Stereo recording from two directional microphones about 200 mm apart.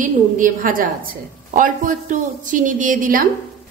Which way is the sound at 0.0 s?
45° right (ahead or behind).